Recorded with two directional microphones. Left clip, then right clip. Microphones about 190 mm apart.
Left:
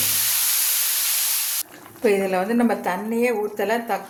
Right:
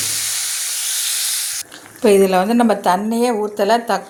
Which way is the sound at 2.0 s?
40° right (ahead or behind).